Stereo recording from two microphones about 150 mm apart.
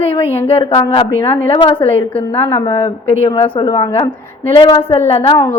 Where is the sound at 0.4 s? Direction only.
40° left (ahead or behind).